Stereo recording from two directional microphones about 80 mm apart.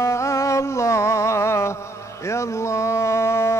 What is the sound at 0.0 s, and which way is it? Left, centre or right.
Music, left.